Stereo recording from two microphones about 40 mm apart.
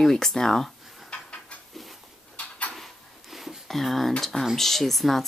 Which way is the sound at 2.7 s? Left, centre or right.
Centre.